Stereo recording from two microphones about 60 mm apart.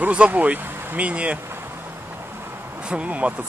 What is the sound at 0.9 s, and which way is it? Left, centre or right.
Speech, right.